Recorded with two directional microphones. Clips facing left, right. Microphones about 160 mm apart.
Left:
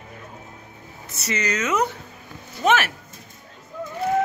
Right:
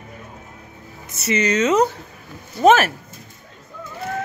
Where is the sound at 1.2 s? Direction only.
25° right (ahead or behind).